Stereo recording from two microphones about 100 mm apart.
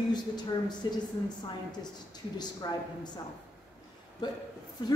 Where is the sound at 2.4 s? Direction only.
45° left (ahead or behind).